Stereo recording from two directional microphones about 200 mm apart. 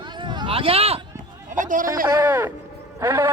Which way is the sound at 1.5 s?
40° right (ahead or behind).